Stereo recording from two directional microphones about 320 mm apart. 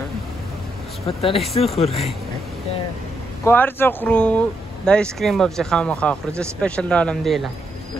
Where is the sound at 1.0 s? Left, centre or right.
Centre.